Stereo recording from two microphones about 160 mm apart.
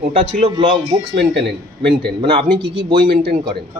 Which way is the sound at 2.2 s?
35° right (ahead or behind).